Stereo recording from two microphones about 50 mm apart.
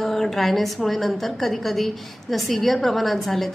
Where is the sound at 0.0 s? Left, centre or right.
Centre.